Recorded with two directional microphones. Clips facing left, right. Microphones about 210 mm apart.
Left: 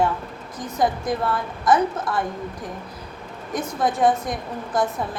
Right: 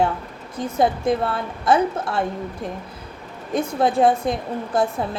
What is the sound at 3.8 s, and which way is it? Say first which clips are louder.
A woman's voice: right 2 dB; 25° right (ahead or behind).